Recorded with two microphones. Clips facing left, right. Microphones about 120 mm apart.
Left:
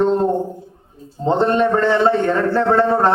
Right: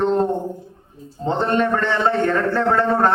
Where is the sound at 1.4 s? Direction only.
25° left (ahead or behind).